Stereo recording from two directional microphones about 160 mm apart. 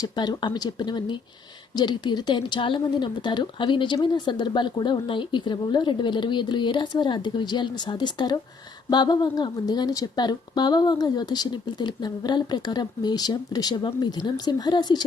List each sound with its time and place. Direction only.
0.0 s speech: 25° left (ahead or behind)